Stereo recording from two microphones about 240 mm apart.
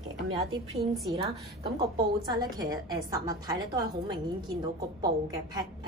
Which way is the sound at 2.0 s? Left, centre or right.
Centre.